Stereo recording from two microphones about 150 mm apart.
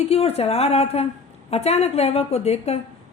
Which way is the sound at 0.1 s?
45° left (ahead or behind).